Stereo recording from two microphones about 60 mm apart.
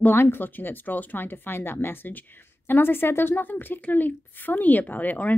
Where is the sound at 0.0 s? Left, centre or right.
Left.